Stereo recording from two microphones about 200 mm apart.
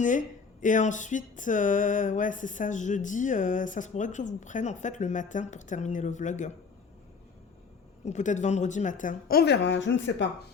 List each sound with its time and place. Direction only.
0.0 s speech: 40° left (ahead or behind)
8.0 s speech: 35° left (ahead or behind); by 10.2 s 65° left (ahead or behind)